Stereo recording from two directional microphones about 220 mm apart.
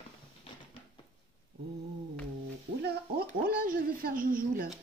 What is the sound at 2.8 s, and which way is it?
Speech, 45° right (ahead or behind).